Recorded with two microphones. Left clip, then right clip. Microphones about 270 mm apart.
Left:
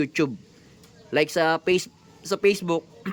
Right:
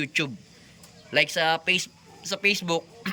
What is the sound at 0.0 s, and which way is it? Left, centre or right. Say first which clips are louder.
Speech: left 2 dB; centre.